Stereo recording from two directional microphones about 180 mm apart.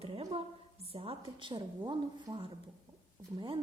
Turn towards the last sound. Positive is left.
turn(degrees=-30)  # may be behind; listen again after turning